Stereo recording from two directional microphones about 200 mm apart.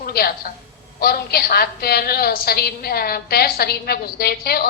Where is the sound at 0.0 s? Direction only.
50° left (ahead or behind).